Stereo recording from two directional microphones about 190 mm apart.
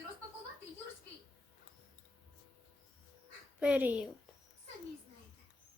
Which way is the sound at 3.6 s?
5° right (ahead or behind).